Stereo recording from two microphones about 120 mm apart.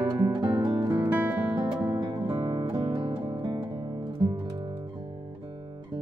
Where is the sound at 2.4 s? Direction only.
30° right (ahead or behind).